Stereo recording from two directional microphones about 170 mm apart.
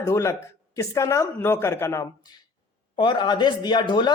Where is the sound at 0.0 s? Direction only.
15° left (ahead or behind).